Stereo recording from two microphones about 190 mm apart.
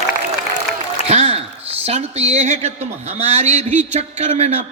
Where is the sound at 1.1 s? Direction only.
35° right (ahead or behind).